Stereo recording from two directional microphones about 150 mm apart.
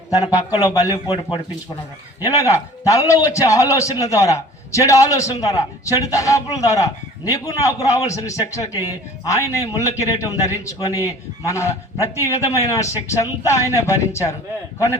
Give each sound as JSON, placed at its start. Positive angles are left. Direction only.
{"t": 0.1, "sound": "a man's voice", "side_deg": 25}
{"t": 2.2, "sound": "a man's voice", "side_deg": 20}